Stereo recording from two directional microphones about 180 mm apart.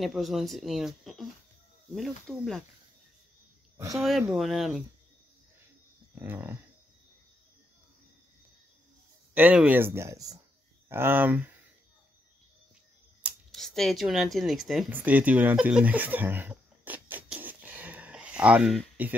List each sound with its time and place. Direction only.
0.0 s speech: centre (ahead or behind)
3.7 s speech: 20° right (ahead or behind)
4.2 s speech: 5° right (ahead or behind)
6.1 s speech: 10° right (ahead or behind)
9.3 s speech: 10° right (ahead or behind)
13.2 s speech: centre (ahead or behind)